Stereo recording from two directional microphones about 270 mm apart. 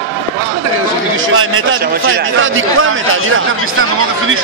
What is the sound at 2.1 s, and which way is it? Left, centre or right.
Speech, right.